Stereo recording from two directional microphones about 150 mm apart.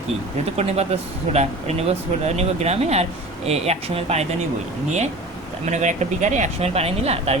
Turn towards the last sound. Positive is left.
turn(degrees=-45)  # may be behind; listen again after turning